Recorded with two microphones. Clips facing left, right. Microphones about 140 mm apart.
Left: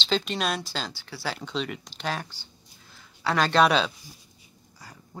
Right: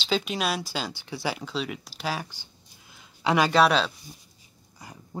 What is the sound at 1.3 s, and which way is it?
Speech, 5° right (ahead or behind).